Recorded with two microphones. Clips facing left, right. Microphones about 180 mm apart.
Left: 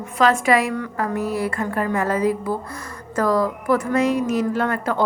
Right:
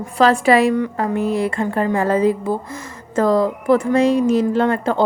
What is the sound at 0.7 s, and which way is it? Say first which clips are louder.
A woman's voice: right 5 dB; 20° right (ahead or behind).